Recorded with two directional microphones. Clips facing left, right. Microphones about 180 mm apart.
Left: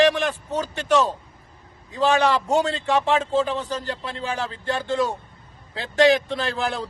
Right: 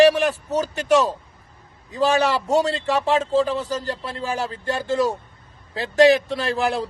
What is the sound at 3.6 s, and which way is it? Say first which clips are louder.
Speech: right 2 dB; 35° right (ahead or behind).